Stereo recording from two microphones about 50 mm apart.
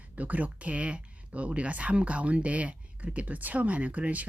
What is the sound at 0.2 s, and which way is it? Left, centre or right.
A woman's voice, right.